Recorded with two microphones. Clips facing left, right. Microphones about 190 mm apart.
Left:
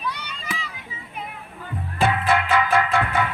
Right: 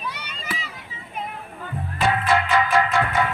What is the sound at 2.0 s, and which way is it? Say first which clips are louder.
Music: even; 55° left (ahead or behind).